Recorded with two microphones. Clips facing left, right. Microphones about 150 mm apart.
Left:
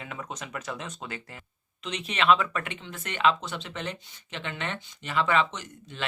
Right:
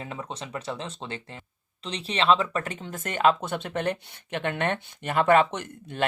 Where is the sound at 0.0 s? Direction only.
30° right (ahead or behind).